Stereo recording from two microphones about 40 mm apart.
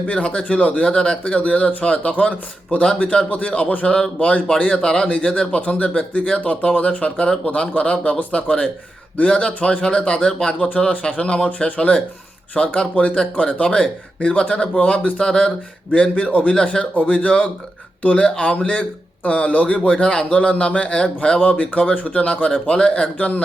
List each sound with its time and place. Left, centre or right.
0.1 s speech: left
0.9 s speech: left
1.4 s speech: left
2.8 s speech: left
3.1 s speech: left
3.8 s speech: centre
4.2 s speech: left
6.2 s speech: centre
6.5 s speech: left
9.5 s speech: left
9.8 s speech: left
10.7 s speech: left
15.2 s speech: centre
21.4 s speech: left